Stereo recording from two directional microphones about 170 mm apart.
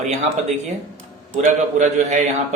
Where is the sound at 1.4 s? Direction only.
45° right (ahead or behind).